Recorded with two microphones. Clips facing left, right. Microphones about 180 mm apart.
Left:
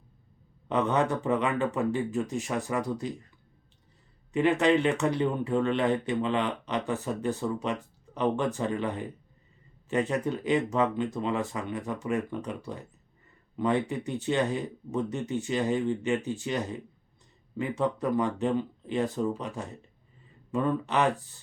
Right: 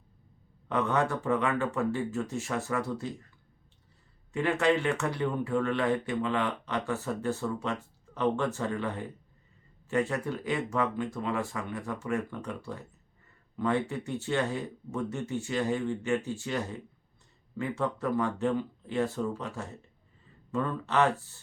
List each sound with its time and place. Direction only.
0.7 s speech: 20° left (ahead or behind)
4.3 s speech: 20° left (ahead or behind)